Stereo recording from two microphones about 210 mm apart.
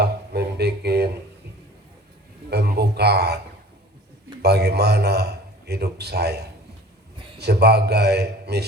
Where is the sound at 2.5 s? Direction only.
50° right (ahead or behind).